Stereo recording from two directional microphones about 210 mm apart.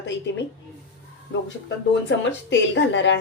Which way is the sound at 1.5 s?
60° left (ahead or behind).